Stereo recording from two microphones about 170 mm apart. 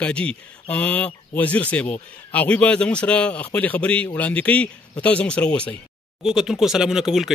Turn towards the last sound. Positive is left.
turn(degrees=0)  # may be behind; listen again after turning